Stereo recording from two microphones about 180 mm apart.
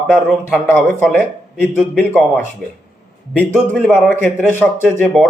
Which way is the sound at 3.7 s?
5° left (ahead or behind).